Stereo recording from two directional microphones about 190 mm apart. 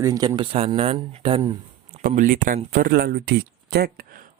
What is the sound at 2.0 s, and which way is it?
Speech, 45° right (ahead or behind).